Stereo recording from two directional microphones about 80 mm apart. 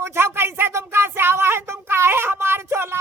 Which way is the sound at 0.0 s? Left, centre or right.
Right.